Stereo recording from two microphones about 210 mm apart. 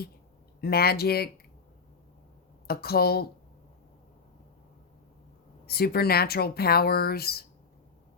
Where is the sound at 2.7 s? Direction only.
45° left (ahead or behind).